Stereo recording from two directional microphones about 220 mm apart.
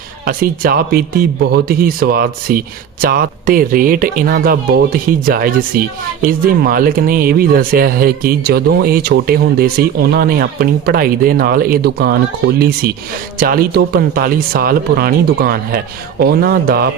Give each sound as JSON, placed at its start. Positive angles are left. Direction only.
{"t": 0.3, "sound": "speech", "side_deg": -40}